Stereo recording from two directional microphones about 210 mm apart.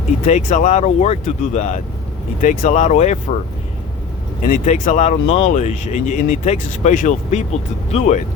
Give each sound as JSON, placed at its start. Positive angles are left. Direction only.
{"t": 0.3, "sound": "speech", "side_deg": 35}
{"t": 4.4, "sound": "speech", "side_deg": 35}